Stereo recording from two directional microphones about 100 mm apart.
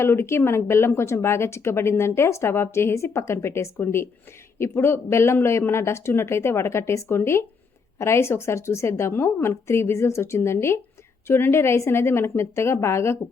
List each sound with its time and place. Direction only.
0.0 s speech: 25° left (ahead or behind)